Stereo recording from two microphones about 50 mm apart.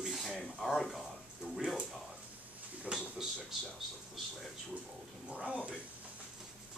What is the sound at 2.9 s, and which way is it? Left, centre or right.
Speech, centre.